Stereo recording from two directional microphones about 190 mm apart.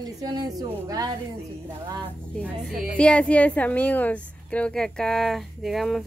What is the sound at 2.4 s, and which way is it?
A woman's voice, 5° right (ahead or behind).